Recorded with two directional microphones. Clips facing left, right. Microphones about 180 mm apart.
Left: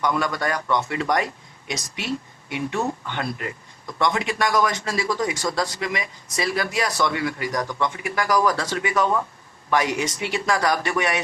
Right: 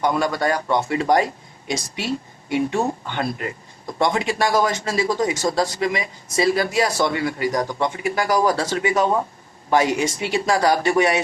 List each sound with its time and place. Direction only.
0.0 s speech: 30° right (ahead or behind)
2.6 s speech: 30° right (ahead or behind)